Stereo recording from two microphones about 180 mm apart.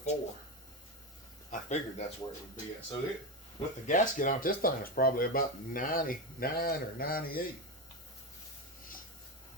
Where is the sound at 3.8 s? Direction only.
45° left (ahead or behind).